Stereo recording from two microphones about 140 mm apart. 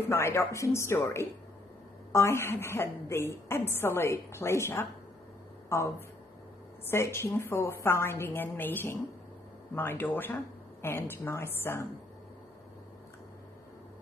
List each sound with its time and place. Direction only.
0.0 s a woman's voice: 20° left (ahead or behind)